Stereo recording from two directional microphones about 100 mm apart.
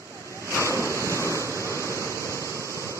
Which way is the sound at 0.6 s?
30° right (ahead or behind).